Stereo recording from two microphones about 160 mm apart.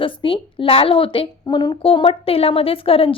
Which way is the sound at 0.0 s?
35° left (ahead or behind).